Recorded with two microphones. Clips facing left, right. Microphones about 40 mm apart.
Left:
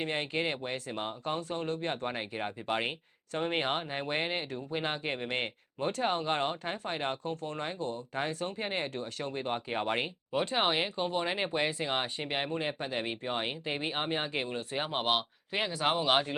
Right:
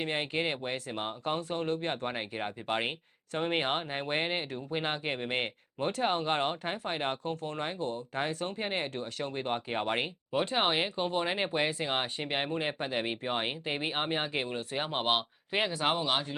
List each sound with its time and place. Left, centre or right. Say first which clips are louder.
0.0 s speech: right 1 dB; centre